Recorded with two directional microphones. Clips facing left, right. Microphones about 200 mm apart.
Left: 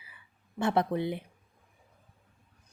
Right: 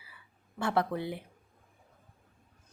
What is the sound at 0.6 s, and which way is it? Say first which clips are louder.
Speech: left 3 dB; 20° left (ahead or behind).